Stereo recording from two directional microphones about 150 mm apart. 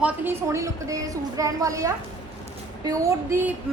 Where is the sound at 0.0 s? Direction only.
15° right (ahead or behind).